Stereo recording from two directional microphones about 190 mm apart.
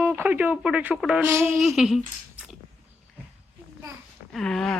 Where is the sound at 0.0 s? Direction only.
10° right (ahead or behind).